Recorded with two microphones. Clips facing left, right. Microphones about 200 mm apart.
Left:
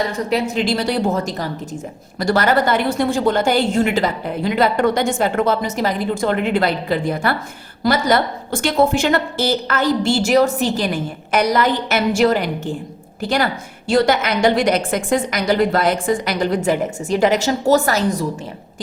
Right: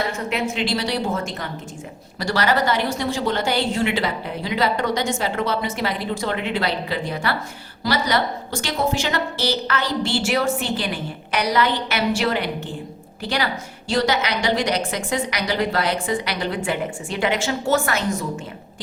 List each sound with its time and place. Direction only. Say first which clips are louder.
0.3 s a woman's voice: left 6 dB; 40° left (ahead or behind)
2.1 s a woman's voice: left 5 dB; 50° left (ahead or behind)